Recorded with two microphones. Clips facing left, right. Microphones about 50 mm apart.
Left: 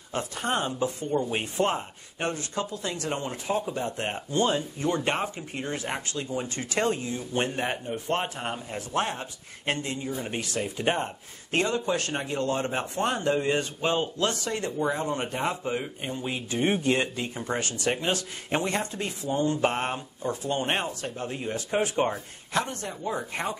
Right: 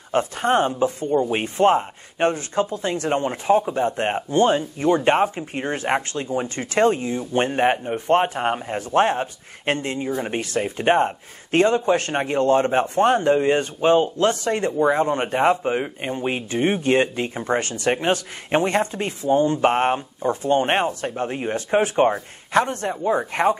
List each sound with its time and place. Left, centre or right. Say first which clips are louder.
0.1 s speech: right 9 dB; right